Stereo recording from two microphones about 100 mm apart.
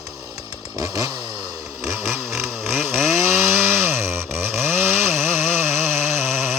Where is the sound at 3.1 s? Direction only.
25° right (ahead or behind).